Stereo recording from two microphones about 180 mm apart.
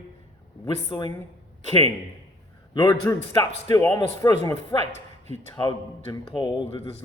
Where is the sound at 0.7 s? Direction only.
25° left (ahead or behind).